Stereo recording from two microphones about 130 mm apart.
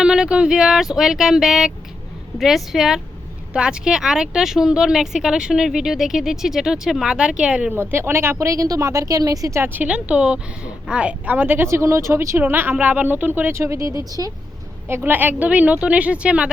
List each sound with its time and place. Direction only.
0.0 s speech: 5° right (ahead or behind)
7.8 s speech: 20° right (ahead or behind)
14.8 s speech: 15° right (ahead or behind)